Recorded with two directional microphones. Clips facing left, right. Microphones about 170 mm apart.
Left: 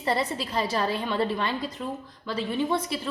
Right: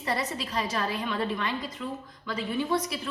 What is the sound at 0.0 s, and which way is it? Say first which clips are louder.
A woman's voice: left 4 dB; 30° left (ahead or behind).